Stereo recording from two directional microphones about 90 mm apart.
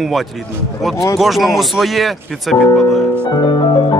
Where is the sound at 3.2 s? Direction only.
55° left (ahead or behind).